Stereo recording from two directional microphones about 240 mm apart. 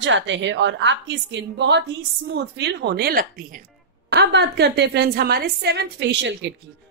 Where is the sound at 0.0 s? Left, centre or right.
Right.